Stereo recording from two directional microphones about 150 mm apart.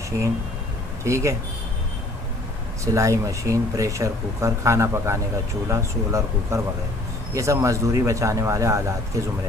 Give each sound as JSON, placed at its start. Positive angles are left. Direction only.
{"t": 1.0, "sound": "speech", "side_deg": -20}
{"t": 2.8, "sound": "speech", "side_deg": -20}